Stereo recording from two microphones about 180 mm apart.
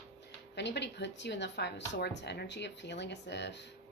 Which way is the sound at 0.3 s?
70° left (ahead or behind).